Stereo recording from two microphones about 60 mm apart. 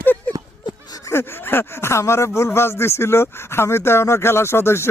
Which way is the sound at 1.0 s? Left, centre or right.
Left.